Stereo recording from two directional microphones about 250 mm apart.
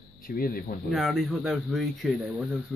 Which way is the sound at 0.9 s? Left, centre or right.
Centre.